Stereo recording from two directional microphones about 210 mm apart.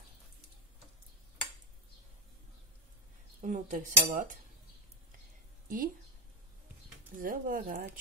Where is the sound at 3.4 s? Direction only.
35° right (ahead or behind).